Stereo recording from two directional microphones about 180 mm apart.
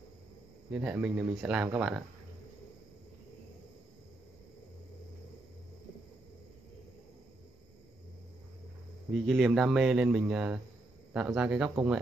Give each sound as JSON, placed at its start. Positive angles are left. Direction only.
{"t": 0.7, "sound": "a man's voice", "side_deg": -5}
{"t": 9.1, "sound": "a man's voice", "side_deg": 0}